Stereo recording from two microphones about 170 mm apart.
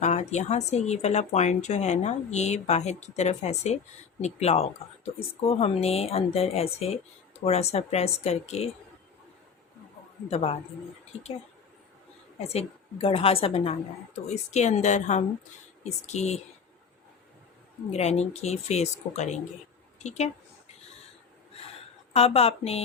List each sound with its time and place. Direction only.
0.0 s speech: 40° left (ahead or behind)
10.2 s speech: 35° left (ahead or behind)
12.5 s a woman's voice: 35° left (ahead or behind)
17.9 s speech: 40° left (ahead or behind)
22.1 s speech: 35° left (ahead or behind)